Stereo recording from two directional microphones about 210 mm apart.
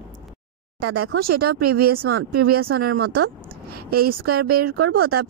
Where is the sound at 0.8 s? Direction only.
90° right.